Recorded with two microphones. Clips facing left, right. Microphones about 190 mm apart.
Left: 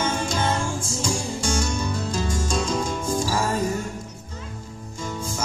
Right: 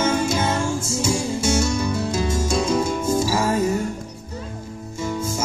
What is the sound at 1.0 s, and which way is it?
Music, 10° right (ahead or behind).